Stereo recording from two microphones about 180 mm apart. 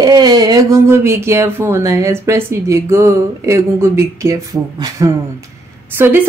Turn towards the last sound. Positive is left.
turn(degrees=-10)  # may be behind; listen again after turning